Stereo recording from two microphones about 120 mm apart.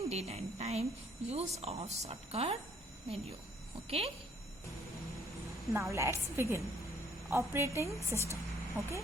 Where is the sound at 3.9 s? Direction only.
55° right (ahead or behind).